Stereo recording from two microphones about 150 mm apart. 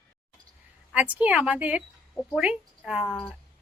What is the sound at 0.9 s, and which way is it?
A woman's voice, 10° right (ahead or behind).